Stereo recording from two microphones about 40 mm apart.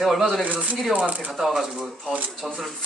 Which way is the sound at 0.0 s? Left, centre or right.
Centre.